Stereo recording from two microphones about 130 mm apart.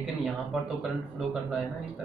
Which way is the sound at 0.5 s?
5° right (ahead or behind).